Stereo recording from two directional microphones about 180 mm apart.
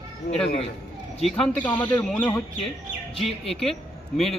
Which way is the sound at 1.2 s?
5° left (ahead or behind).